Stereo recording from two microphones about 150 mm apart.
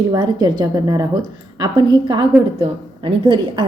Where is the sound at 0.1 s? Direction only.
25° right (ahead or behind).